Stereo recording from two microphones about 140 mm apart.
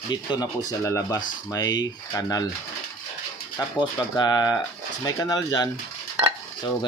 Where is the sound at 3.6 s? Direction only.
30° left (ahead or behind).